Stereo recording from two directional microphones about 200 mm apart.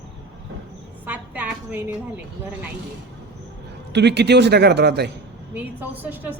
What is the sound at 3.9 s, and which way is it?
A man's voice, 60° right (ahead or behind).